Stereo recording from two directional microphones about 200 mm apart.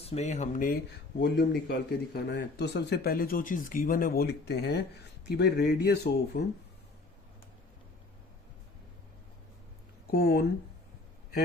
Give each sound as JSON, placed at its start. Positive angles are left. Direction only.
{"t": 0.0, "sound": "speech", "side_deg": 30}
{"t": 1.2, "sound": "a man's voice", "side_deg": 55}
{"t": 10.1, "sound": "a man's voice", "side_deg": 50}